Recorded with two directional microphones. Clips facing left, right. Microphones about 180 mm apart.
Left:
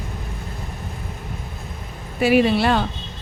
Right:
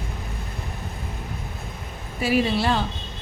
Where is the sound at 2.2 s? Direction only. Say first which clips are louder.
Left 5 dB; 65° left (ahead or behind).